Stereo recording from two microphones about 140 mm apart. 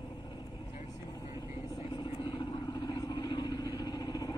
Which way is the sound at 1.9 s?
35° left (ahead or behind).